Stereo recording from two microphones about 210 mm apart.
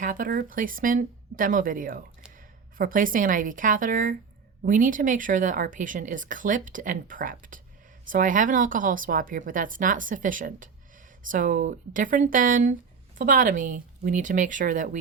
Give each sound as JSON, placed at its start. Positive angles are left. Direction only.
{"t": 0.0, "sound": "speech", "side_deg": -40}